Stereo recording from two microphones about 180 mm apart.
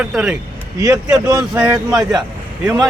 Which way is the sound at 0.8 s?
20° right (ahead or behind).